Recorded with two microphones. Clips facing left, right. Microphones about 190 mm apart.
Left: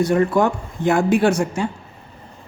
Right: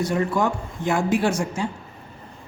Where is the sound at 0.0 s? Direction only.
60° left (ahead or behind).